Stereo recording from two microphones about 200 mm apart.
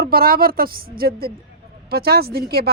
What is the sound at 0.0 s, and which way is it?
Speech, 45° right (ahead or behind).